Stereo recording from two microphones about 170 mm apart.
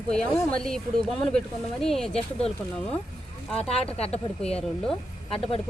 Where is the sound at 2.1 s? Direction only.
35° left (ahead or behind).